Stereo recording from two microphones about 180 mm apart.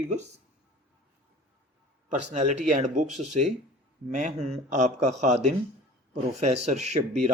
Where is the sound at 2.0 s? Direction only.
40° right (ahead or behind).